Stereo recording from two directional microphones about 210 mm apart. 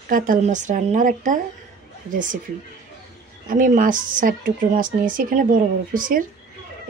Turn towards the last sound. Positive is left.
turn(degrees=-40)  # may be behind; listen again after turning